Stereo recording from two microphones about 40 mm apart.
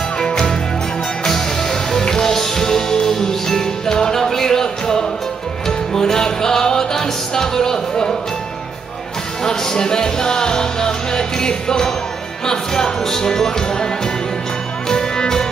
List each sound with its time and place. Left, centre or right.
0.2 s music: centre
9.4 s music: centre
14.9 s music: centre